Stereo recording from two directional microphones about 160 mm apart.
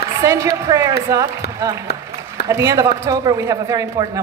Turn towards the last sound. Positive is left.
turn(degrees=-20)  # may be behind; listen again after turning